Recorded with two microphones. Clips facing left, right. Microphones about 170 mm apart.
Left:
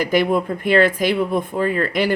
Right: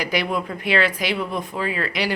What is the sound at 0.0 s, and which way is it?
Speech, 50° left (ahead or behind).